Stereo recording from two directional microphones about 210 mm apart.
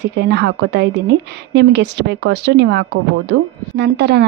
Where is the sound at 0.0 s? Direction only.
55° right (ahead or behind).